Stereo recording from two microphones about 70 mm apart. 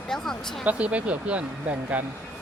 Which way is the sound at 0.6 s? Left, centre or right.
Centre.